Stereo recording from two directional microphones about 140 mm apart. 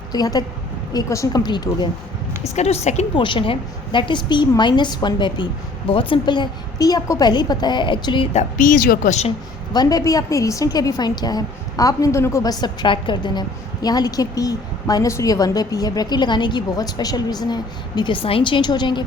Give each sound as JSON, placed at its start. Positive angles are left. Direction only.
{"t": 0.1, "sound": "a woman's voice", "side_deg": 25}
{"t": 2.6, "sound": "a woman's voice", "side_deg": 50}
{"t": 3.2, "sound": "a woman's voice", "side_deg": 35}
{"t": 8.5, "sound": "speech", "side_deg": 70}
{"t": 9.7, "sound": "a woman's voice", "side_deg": 25}